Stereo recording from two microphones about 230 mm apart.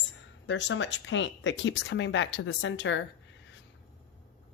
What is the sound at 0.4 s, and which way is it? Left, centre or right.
A woman's voice, left.